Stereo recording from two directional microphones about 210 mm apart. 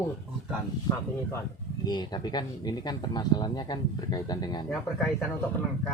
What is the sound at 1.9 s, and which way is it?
Speech, 20° left (ahead or behind).